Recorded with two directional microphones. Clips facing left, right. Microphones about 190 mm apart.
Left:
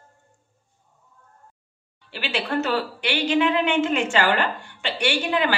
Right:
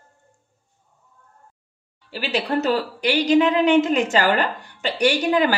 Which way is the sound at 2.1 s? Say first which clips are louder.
Right 3 dB; 40° right (ahead or behind).